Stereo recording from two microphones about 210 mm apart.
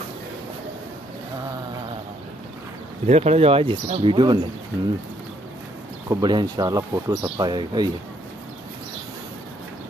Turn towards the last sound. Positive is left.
turn(degrees=-20)  # may be behind; listen again after turning